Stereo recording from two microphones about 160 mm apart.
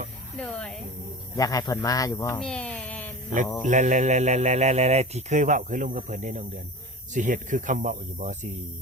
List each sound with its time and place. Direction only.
0.3 s speech: 5° left (ahead or behind)
1.4 s speech: 20° left (ahead or behind)
2.4 s a sound: 5° left (ahead or behind)
3.6 s speech: 50° right (ahead or behind)